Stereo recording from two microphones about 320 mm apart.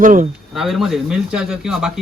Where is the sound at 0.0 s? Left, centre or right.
Right.